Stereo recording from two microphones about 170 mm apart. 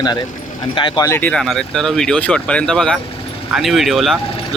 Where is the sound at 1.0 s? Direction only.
10° left (ahead or behind).